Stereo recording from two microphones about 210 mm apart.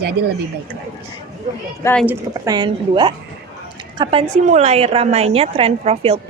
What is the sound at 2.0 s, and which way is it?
A woman's voice, 15° right (ahead or behind).